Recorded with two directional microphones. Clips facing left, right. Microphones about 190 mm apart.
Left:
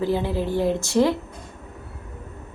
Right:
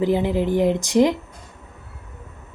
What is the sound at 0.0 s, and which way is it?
A woman's voice, 15° right (ahead or behind).